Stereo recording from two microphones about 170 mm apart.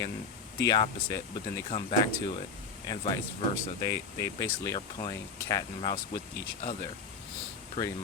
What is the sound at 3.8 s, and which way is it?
Speech, 20° left (ahead or behind).